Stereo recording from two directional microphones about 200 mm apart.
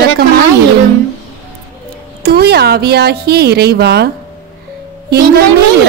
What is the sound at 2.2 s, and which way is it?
A woman's voice, 55° right (ahead or behind).